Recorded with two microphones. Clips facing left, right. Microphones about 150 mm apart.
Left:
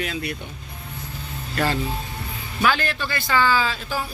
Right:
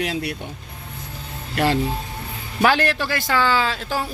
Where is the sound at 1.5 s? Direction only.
70° right (ahead or behind).